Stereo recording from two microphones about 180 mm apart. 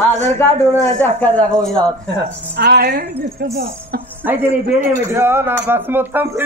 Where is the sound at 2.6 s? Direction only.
65° right (ahead or behind).